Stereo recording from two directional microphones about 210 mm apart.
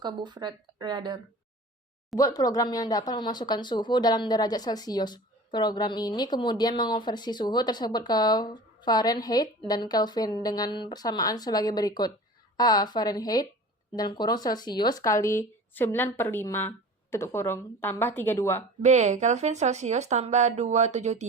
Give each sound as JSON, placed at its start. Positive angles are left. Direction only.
{"t": 0.0, "sound": "speech", "side_deg": -20}
{"t": 2.1, "sound": "speech", "side_deg": 15}
{"t": 18.8, "sound": "speech", "side_deg": -35}